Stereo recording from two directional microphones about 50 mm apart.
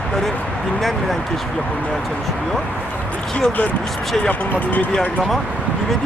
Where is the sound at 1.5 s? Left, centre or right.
Left.